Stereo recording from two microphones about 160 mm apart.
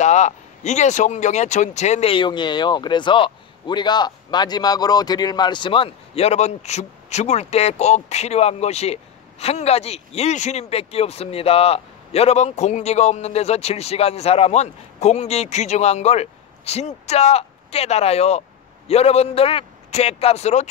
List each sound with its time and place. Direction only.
0.0 s speech: 45° left (ahead or behind)